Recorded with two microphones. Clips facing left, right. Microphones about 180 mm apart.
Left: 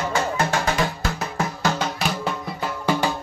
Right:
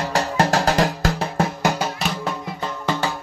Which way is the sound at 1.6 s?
10° right (ahead or behind).